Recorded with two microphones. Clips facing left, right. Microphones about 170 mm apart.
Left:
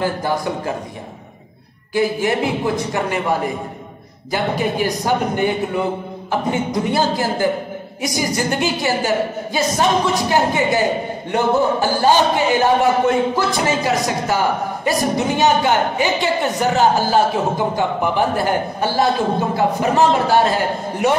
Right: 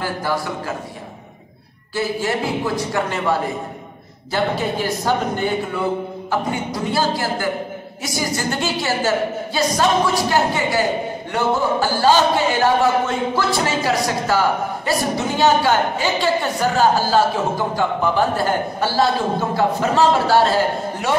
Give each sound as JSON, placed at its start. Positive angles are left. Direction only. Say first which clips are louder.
{"t": 0.0, "sound": "a woman's voice", "louder": "left 3 dB", "side_deg": 20}
{"t": 2.0, "sound": "a man's voice", "louder": "left 4 dB", "side_deg": 15}
{"t": 6.7, "sound": "a woman's voice", "louder": "left 1 dB", "side_deg": 20}